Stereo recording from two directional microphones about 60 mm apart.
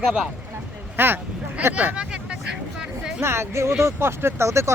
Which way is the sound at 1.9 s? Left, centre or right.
Centre.